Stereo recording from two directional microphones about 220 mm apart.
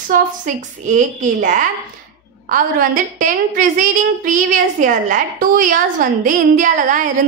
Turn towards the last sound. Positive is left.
turn(degrees=-35)  # may be behind; listen again after turning